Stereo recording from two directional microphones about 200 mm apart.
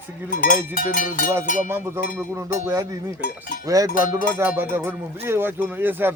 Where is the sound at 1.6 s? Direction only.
10° right (ahead or behind).